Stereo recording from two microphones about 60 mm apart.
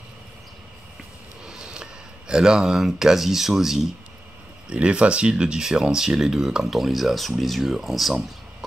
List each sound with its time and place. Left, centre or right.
1.4 s speech: centre
4.6 s speech: centre